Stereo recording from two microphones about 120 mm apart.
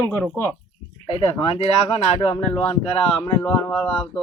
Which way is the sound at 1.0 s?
55° left (ahead or behind).